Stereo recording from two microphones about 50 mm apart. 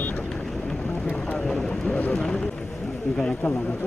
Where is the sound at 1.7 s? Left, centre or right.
Left.